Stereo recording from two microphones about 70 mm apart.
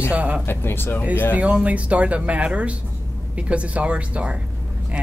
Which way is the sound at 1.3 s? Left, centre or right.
Centre.